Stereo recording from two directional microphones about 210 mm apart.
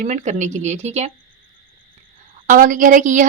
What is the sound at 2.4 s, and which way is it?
Speech, 40° right (ahead or behind).